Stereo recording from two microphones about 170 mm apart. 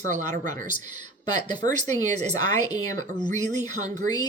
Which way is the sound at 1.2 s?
25° left (ahead or behind).